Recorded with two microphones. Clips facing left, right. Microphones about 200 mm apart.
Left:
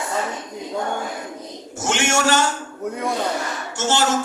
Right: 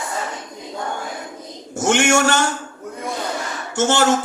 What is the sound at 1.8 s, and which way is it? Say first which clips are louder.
Speech: right 4 dB; 55° right (ahead or behind).